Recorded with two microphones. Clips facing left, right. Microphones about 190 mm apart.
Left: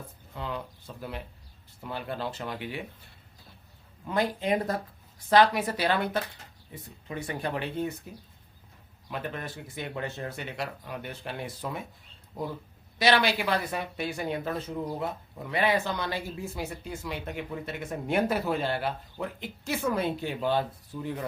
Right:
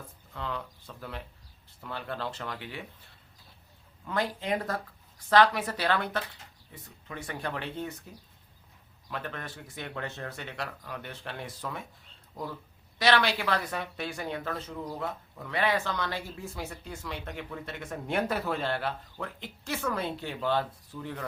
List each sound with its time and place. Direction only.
0.3 s speech: 15° left (ahead or behind)
4.0 s speech: 15° left (ahead or behind)
13.0 s speech: 10° left (ahead or behind)